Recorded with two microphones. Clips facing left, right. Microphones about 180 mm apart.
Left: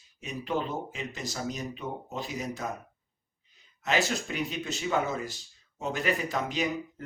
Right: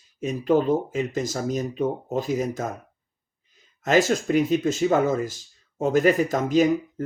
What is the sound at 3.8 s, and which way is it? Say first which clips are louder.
Speech: right 9 dB; 45° right (ahead or behind).